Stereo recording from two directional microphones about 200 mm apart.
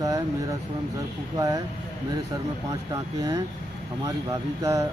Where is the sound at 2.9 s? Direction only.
20° right (ahead or behind).